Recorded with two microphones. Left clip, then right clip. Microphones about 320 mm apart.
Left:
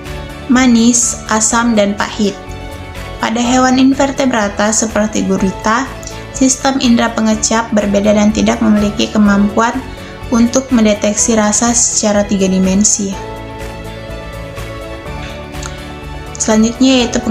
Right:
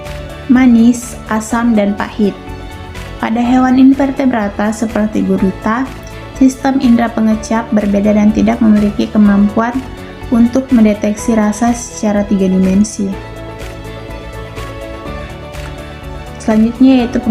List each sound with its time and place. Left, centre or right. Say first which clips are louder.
0.5 s a woman's voice: right 1 dB; right
3.2 s a woman's voice: left 1 dB; right
16.4 s a woman's voice: even; right